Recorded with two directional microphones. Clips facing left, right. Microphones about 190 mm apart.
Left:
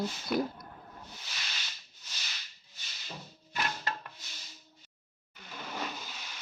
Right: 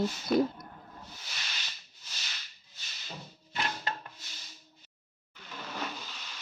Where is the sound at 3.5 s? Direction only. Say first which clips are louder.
Even; 25° right (ahead or behind).